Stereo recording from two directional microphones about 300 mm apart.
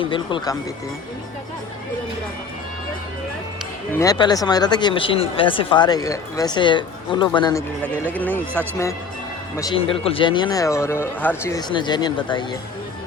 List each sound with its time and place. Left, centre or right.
0.0 s speech: centre
3.9 s speech: centre